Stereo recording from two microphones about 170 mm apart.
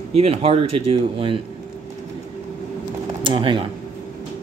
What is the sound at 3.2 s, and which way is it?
Speech, 30° right (ahead or behind).